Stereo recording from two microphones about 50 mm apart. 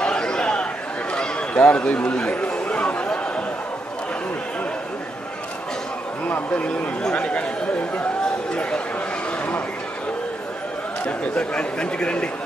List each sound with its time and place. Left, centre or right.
0.0 s chatter: centre
6.2 s a sound: left
7.0 s speech: centre
8.5 s a man's voice: left
11.1 s a man's voice: left